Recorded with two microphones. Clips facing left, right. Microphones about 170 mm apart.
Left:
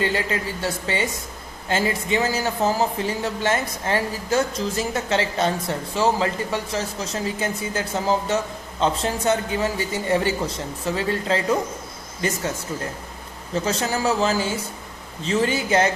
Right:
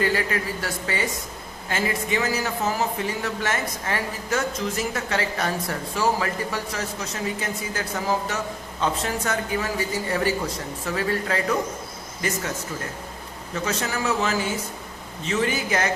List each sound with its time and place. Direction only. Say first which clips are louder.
0.0 s speech: even; 25° left (ahead or behind)
13.5 s speech: left 4 dB; 30° left (ahead or behind)